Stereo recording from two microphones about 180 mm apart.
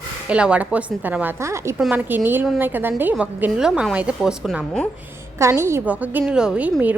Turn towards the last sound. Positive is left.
turn(degrees=-10)  # may be behind; listen again after turning